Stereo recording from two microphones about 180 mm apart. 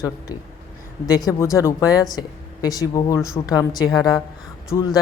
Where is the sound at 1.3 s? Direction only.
15° left (ahead or behind).